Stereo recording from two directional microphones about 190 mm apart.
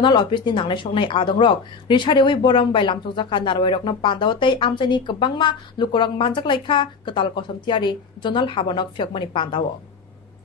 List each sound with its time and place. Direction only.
0.0 s speech: 25° left (ahead or behind)